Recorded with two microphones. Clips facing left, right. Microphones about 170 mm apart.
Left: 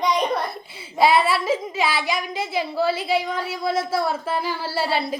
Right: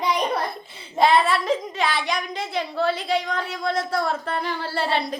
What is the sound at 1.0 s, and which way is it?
A child's voice, 5° left (ahead or behind).